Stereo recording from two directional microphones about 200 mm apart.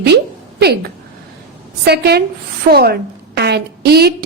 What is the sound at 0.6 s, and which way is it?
A woman's voice, 55° right (ahead or behind).